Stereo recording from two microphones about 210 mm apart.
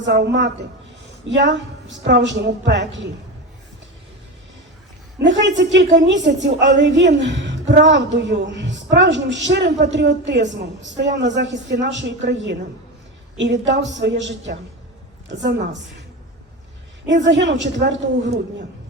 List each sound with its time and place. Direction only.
0.0 s a woman's voice: 55° right (ahead or behind)
5.2 s a woman's voice: 55° right (ahead or behind)
17.1 s a woman's voice: 55° right (ahead or behind)